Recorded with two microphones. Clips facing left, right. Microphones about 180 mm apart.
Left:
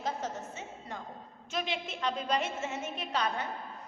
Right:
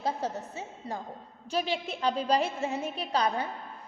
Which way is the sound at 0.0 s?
35° right (ahead or behind).